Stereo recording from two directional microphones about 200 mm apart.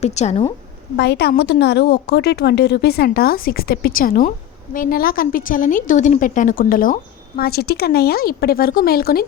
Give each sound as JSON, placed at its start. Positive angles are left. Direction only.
{"t": 0.0, "sound": "a woman's voice", "side_deg": 35}
{"t": 0.9, "sound": "a woman's voice", "side_deg": 55}